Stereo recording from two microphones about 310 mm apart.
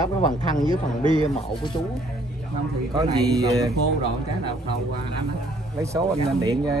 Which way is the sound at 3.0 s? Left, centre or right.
Centre.